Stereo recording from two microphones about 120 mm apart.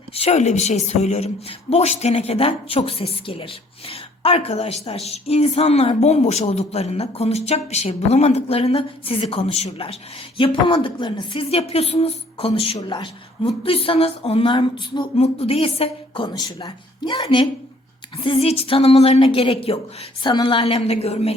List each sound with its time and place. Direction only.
0.1 s speech: 60° left (ahead or behind); by 11.4 s 40° left (ahead or behind)
11.5 s a woman's voice: 60° left (ahead or behind); by 15.1 s 40° left (ahead or behind)
15.1 s a woman's voice: 55° left (ahead or behind); by 17.2 s 35° left (ahead or behind)
18.2 s a woman's voice: 50° left (ahead or behind)
20.2 s a woman's voice: 40° left (ahead or behind)
20.7 s speech: 60° left (ahead or behind)